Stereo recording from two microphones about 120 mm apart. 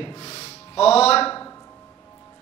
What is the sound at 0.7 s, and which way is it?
Speech, 60° left (ahead or behind).